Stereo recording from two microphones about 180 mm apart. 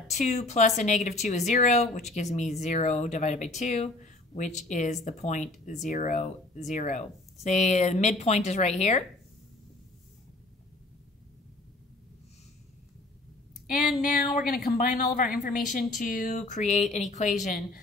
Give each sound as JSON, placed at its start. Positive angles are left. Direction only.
{"t": 0.1, "sound": "speech", "side_deg": 40}
{"t": 13.7, "sound": "speech", "side_deg": 50}